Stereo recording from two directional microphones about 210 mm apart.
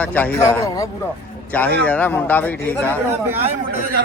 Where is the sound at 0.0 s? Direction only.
10° left (ahead or behind).